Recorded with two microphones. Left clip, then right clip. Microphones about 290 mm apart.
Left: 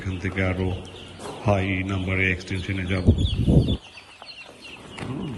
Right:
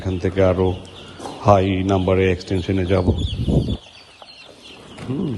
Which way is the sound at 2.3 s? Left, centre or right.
Centre.